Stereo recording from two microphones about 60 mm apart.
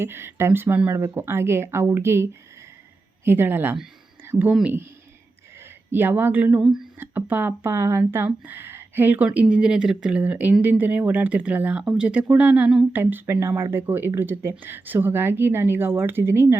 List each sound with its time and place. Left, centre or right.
0.0 s a woman's voice: right
5.9 s a woman's voice: right
6.6 s speech: centre
7.2 s speech: right
7.7 s a woman's voice: right; by 10.2 s centre
10.2 s speech: right
11.8 s speech: centre
12.0 s a woman's voice: right